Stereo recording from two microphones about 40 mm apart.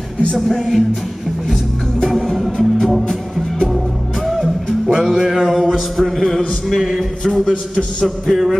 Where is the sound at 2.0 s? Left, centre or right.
Centre.